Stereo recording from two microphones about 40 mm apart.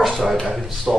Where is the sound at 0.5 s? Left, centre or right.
Centre.